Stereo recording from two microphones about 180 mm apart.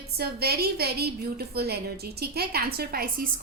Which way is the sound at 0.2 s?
60° right (ahead or behind).